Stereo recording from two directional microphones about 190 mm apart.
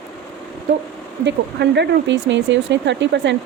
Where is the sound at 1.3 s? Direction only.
70° right (ahead or behind).